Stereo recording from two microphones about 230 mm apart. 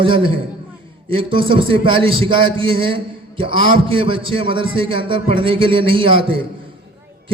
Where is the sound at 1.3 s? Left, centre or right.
Right.